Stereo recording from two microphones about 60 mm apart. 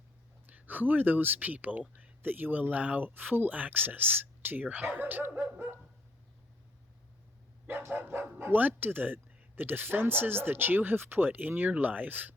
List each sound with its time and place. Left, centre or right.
0.4 s speech: right
7.7 s speech: right